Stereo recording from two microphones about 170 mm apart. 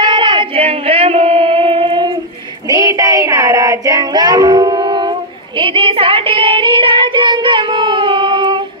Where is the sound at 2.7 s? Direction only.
20° right (ahead or behind).